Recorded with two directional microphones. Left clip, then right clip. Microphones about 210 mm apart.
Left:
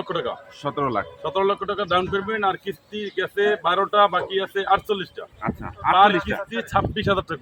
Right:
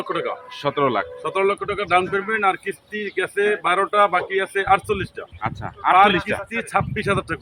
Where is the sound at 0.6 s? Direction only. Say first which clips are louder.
Right 4 dB; 50° right (ahead or behind).